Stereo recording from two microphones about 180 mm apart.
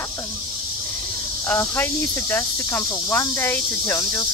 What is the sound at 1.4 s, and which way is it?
Speech, 10° left (ahead or behind).